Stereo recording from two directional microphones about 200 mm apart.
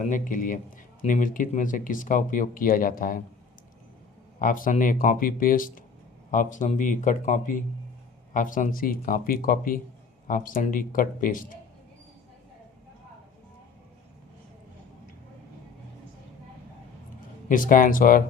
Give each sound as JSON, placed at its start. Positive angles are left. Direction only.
{"t": 0.0, "sound": "a man's voice", "side_deg": 40}
{"t": 4.4, "sound": "a man's voice", "side_deg": 45}
{"t": 17.5, "sound": "a man's voice", "side_deg": 45}